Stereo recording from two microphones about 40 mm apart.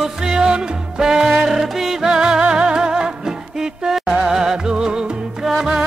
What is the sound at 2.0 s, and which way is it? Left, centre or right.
Music, centre.